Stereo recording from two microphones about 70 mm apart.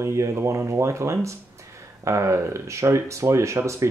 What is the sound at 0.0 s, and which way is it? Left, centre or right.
Speech, right.